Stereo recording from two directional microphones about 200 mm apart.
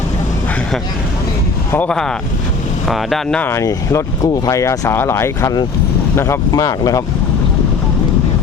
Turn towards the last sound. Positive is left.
turn(degrees=20)  # may be behind; listen again after turning